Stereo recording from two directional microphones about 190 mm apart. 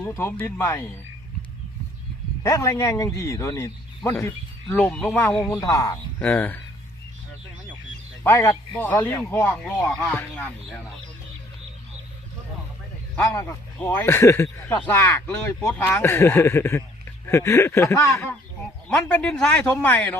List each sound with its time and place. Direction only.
0.0 s speech: 15° left (ahead or behind)
2.4 s speech: 15° left (ahead or behind)
5.5 s speech: 15° left (ahead or behind)
8.2 s speech: 15° left (ahead or behind)
13.2 s speech: 15° left (ahead or behind)